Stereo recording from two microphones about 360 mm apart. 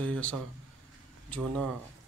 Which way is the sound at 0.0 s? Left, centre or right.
Centre.